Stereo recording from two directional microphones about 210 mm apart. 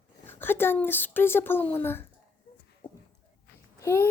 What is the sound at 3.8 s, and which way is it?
Speech, 10° left (ahead or behind).